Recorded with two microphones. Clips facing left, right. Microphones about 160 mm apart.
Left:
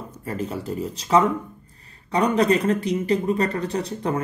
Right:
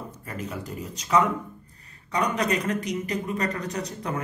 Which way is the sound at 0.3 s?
30° left (ahead or behind).